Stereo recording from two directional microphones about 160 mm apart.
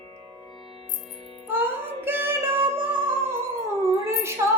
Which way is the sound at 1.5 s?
15° right (ahead or behind).